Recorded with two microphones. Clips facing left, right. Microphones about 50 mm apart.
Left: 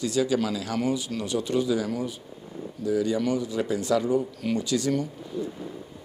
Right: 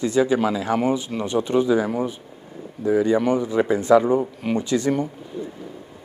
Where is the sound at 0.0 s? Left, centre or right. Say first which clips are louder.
Right 5 dB; right.